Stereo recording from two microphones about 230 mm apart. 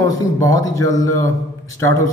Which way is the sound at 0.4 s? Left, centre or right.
Centre.